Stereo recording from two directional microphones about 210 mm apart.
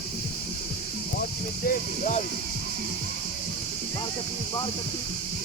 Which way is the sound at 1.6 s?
35° left (ahead or behind).